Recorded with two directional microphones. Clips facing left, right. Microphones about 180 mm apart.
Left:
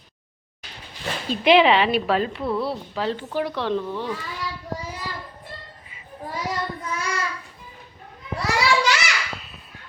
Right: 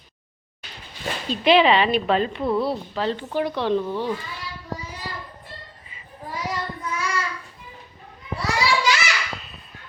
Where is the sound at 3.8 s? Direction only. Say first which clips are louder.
Right 3 dB; 15° right (ahead or behind).